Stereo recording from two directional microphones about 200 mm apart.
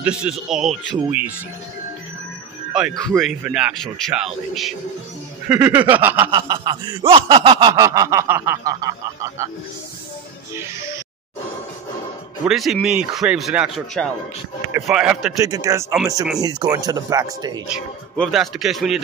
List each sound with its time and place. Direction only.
0.0 s a man's voice: 5° right (ahead or behind)
2.7 s a man's voice: centre (ahead or behind)
6.3 s speech: 20° right (ahead or behind)
12.4 s a man's voice: centre (ahead or behind)
15.4 s a man's voice: 15° right (ahead or behind)
18.1 s a man's voice: centre (ahead or behind)